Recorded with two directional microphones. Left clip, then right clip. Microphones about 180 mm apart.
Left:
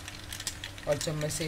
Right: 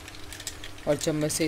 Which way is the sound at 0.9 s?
50° right (ahead or behind).